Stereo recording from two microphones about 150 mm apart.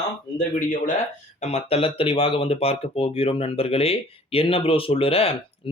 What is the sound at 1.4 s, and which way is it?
Speech, 45° left (ahead or behind).